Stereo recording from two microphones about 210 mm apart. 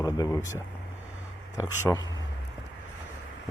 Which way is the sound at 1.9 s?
10° left (ahead or behind).